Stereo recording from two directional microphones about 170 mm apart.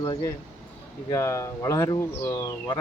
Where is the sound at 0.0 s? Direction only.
25° left (ahead or behind).